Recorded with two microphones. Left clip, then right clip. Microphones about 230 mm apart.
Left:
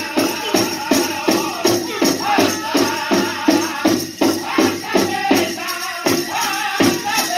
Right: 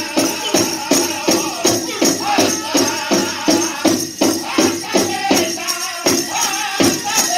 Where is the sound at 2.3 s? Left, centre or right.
Right.